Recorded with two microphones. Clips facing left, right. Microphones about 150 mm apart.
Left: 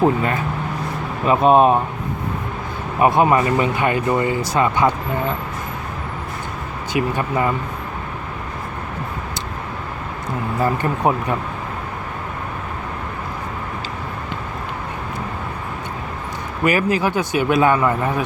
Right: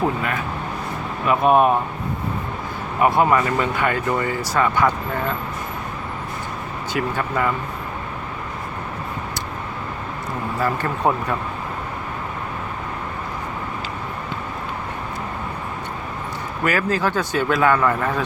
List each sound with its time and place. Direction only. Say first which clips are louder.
0.0 s speech: left 5 dB; 30° left (ahead or behind)
3.0 s speech: left 2 dB; 20° left (ahead or behind)
6.9 s speech: left 3 dB; 20° left (ahead or behind)
10.6 s speech: left 2 dB; 15° left (ahead or behind)
16.6 s speech: left 3 dB; 15° left (ahead or behind)